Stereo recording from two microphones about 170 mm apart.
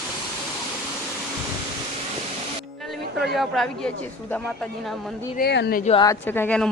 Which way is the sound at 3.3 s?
Centre (ahead or behind).